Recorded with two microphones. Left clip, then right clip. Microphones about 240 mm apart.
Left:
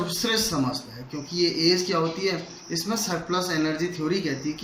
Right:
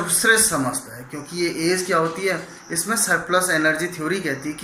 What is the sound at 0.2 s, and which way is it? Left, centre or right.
A man's voice, left.